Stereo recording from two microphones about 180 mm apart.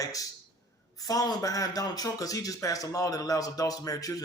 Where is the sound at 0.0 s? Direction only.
20° left (ahead or behind).